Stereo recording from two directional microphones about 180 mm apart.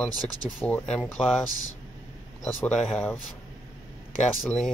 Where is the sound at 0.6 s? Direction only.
10° left (ahead or behind).